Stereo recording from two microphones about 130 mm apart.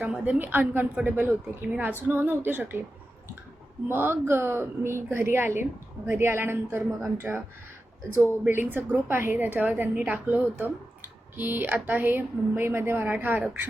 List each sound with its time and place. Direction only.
0.0 s a woman's voice: 10° right (ahead or behind)
3.8 s a woman's voice: 15° right (ahead or behind)
8.4 s a woman's voice: 15° right (ahead or behind)